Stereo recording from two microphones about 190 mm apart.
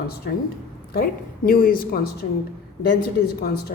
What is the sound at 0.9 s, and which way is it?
A woman's voice, 55° left (ahead or behind).